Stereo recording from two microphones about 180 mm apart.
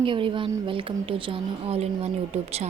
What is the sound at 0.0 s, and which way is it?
A woman's voice, 30° right (ahead or behind).